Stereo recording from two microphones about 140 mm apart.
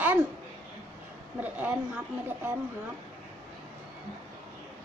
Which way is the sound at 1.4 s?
10° right (ahead or behind).